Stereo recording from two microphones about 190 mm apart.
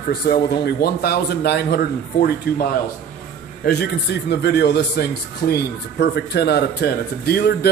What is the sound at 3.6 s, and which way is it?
A man's voice, 60° left (ahead or behind).